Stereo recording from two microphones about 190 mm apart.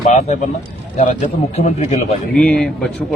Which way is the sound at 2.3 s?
5° left (ahead or behind).